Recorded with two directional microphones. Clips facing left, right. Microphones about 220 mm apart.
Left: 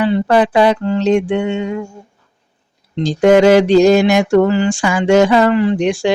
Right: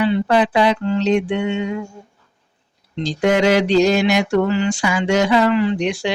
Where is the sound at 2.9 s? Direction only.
50° left (ahead or behind).